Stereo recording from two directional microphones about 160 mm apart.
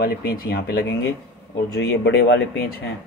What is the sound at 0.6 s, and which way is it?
Speech, 90° left.